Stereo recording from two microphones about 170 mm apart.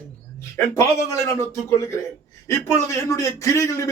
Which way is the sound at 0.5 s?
20° left (ahead or behind).